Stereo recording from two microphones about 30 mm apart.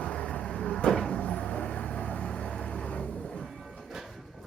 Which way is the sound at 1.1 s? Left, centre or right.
Left.